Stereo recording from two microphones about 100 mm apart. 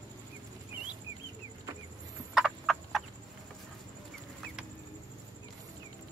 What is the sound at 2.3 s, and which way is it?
Frog, centre (ahead or behind).